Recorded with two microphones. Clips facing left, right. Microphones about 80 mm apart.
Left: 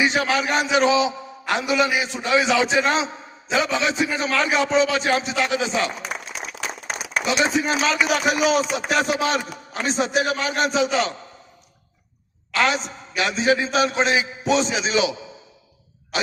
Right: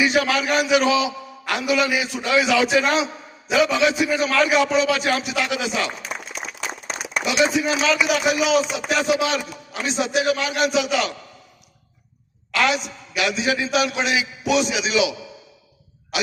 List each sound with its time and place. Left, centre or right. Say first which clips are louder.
0.0 s a man's voice: right 1 dB; left
7.3 s a man's voice: right 1 dB; left
12.5 s a man's voice: even; left
16.1 s a sound: even; left